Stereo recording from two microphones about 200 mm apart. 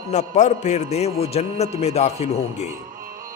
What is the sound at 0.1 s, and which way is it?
A man's voice, 35° left (ahead or behind).